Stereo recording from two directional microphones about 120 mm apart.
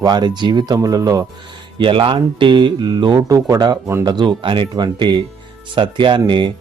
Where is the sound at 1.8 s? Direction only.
45° right (ahead or behind).